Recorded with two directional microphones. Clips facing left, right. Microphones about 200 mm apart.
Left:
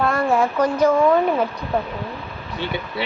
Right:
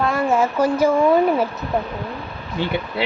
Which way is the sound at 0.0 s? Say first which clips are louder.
Even; centre (ahead or behind).